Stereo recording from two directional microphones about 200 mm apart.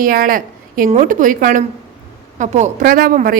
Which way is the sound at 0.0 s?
45° right (ahead or behind).